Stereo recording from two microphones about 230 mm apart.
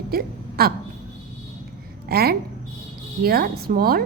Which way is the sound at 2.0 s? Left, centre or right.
Right.